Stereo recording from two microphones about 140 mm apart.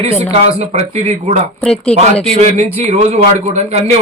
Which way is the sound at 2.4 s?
55° right (ahead or behind).